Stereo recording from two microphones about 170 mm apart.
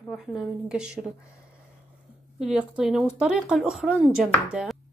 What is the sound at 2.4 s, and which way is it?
Speech, 5° right (ahead or behind).